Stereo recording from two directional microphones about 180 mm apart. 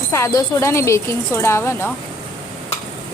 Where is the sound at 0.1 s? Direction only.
20° left (ahead or behind).